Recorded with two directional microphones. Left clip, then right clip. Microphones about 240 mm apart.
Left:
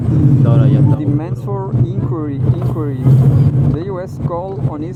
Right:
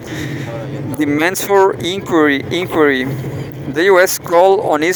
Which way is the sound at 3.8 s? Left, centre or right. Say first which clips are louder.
Right 13 dB; right.